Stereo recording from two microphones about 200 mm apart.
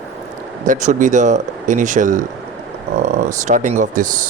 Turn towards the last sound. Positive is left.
turn(degrees=-40)  # may be behind; listen again after turning